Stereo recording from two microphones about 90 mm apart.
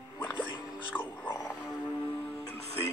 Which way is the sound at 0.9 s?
20° left (ahead or behind).